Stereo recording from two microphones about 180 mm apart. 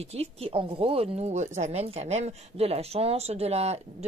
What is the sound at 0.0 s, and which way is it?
Speech, 35° right (ahead or behind).